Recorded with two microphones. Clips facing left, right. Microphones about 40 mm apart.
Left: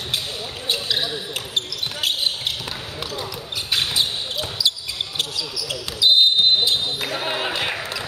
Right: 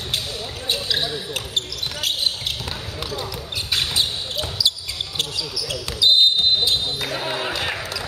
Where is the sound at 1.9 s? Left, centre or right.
Centre.